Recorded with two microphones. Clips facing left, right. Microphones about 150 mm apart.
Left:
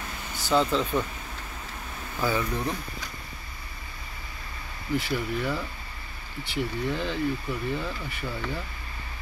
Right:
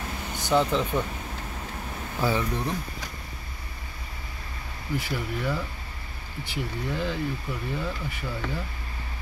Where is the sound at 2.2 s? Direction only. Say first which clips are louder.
Right 1 dB; 25° right (ahead or behind).